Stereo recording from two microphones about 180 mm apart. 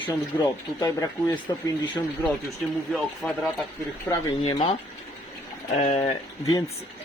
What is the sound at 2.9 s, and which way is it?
Speech, centre (ahead or behind).